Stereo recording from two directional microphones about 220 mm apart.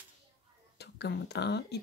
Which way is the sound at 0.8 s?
50° left (ahead or behind).